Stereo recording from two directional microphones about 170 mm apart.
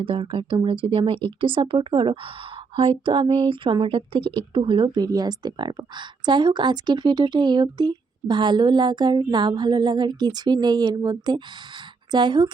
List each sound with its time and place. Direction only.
0.0 s speech: 30° right (ahead or behind)